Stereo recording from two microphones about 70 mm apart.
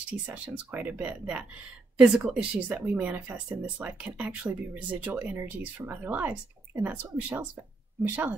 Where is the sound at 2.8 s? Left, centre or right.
Right.